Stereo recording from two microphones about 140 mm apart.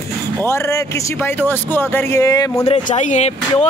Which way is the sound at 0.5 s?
20° left (ahead or behind).